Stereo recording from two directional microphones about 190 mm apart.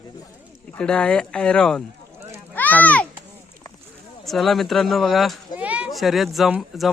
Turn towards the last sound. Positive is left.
turn(degrees=0)  # may be behind; listen again after turning